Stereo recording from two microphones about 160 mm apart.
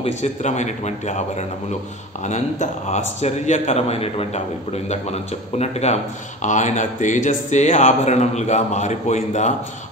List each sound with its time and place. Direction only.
0.0 s a man's voice: 45° left (ahead or behind)